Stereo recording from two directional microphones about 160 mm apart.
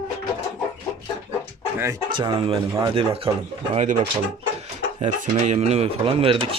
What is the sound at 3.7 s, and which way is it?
Speech, 50° right (ahead or behind).